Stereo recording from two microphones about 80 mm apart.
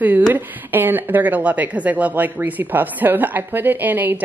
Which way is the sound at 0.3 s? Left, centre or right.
Right.